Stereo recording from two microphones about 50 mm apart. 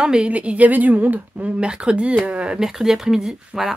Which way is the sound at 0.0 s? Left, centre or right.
Centre.